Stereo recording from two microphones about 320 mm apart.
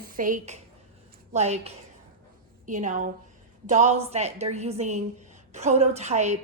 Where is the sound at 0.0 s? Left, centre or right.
Right.